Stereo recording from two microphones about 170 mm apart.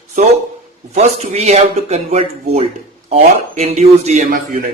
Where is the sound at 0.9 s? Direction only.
40° right (ahead or behind).